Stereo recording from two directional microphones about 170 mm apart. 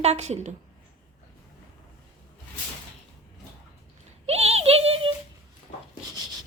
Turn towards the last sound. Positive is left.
turn(degrees=-35)  # may be behind; listen again after turning